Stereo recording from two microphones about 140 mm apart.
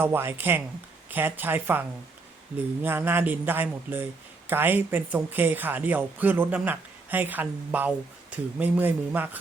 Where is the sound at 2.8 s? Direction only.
15° right (ahead or behind).